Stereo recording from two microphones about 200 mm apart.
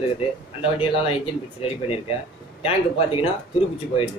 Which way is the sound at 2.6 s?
30° left (ahead or behind).